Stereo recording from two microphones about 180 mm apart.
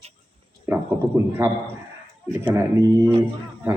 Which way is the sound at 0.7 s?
15° right (ahead or behind).